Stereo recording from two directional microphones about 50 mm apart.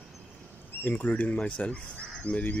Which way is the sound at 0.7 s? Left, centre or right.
Left.